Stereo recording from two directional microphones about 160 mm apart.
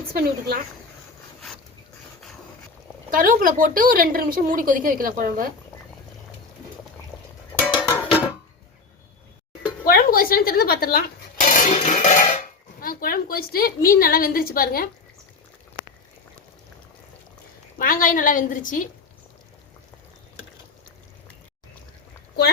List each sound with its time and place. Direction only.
0.1 s speech: 70° right (ahead or behind)
3.1 s a woman's voice: 60° right (ahead or behind)
9.8 s a sound: 65° left (ahead or behind)
12.8 s a woman's voice: 65° left (ahead or behind)
17.7 s a woman's voice: 60° left (ahead or behind)